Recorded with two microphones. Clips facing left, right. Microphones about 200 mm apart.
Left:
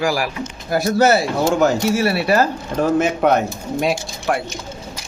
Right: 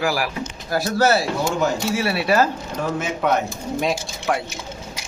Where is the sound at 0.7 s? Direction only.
20° left (ahead or behind).